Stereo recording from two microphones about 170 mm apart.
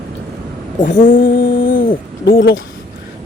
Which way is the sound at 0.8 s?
50° left (ahead or behind).